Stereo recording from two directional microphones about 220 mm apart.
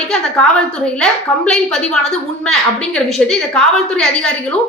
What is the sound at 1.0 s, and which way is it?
A woman's voice, 5° left (ahead or behind).